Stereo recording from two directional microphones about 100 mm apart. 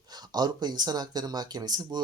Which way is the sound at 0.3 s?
45° right (ahead or behind).